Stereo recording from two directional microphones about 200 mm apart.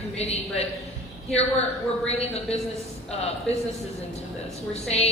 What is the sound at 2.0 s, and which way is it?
A man's voice, 30° left (ahead or behind).